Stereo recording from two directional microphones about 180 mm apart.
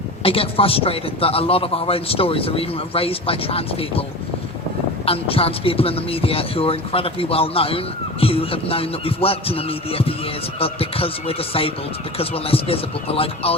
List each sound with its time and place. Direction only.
0.2 s a man's voice: 30° left (ahead or behind)
5.0 s a man's voice: 30° left (ahead or behind)